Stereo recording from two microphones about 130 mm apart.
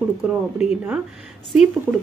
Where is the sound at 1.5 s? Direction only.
5° right (ahead or behind).